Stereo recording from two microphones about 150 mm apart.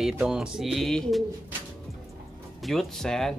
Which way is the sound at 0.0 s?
5° right (ahead or behind).